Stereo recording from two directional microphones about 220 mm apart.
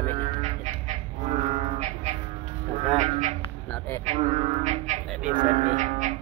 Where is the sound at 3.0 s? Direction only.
30° right (ahead or behind).